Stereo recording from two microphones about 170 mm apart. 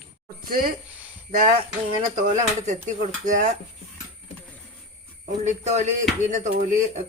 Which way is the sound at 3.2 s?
45° right (ahead or behind).